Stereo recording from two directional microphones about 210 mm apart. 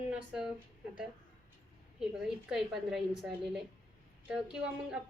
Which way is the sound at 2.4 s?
Centre (ahead or behind).